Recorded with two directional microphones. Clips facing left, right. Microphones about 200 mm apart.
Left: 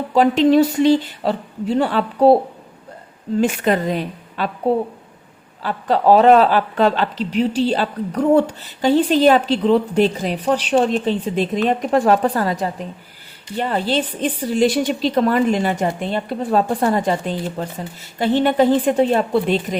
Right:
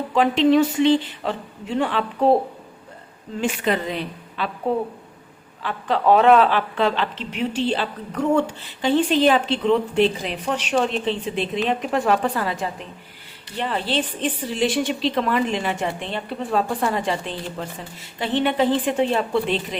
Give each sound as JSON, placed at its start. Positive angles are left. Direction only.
{"t": 0.1, "sound": "a woman's voice", "side_deg": 40}
{"t": 3.4, "sound": "a woman's voice", "side_deg": 45}
{"t": 5.6, "sound": "a woman's voice", "side_deg": 40}